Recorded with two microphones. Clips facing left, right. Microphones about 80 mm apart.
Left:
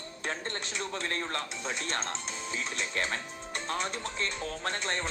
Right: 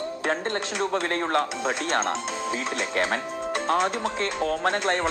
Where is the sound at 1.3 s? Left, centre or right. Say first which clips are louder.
Right 11 dB; right.